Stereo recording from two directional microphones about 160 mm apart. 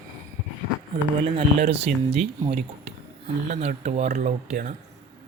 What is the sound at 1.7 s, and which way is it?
Speech, 40° right (ahead or behind).